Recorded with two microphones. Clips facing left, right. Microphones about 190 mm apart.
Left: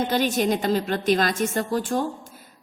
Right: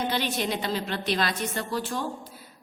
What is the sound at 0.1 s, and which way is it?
A woman's voice, 45° left (ahead or behind).